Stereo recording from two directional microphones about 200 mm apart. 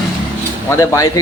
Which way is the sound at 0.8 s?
15° left (ahead or behind).